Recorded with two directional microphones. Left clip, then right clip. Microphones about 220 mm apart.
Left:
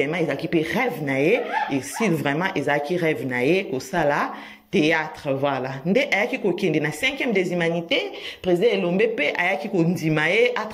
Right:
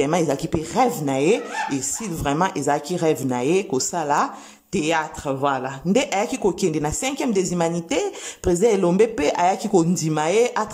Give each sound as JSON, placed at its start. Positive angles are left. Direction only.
{"t": 0.0, "sound": "speech", "side_deg": -20}